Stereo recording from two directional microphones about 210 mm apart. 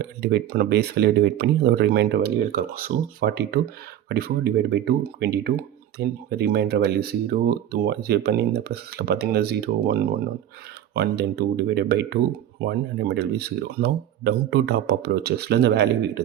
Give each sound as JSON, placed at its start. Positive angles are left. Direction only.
{"t": 0.0, "sound": "speech", "side_deg": -50}